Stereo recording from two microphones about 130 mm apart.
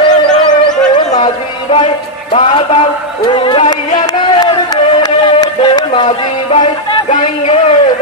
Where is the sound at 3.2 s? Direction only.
40° left (ahead or behind).